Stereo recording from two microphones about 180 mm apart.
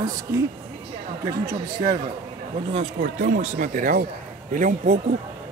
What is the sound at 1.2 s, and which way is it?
Speech, 20° right (ahead or behind).